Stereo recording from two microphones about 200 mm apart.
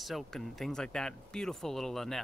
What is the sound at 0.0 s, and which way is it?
Speech, centre (ahead or behind).